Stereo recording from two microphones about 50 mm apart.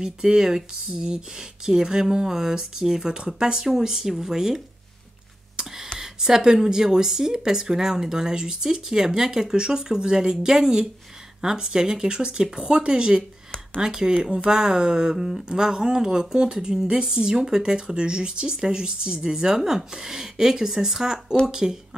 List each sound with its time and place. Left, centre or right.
0.0 s speech: centre
5.9 s speech: centre